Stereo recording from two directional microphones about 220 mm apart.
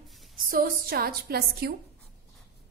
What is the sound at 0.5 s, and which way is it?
A woman's voice, 40° right (ahead or behind).